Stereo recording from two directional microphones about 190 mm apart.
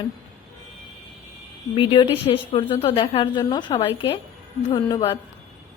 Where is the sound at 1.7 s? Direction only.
25° left (ahead or behind).